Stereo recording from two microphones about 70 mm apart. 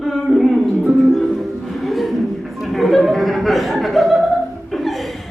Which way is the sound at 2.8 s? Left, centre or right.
Centre.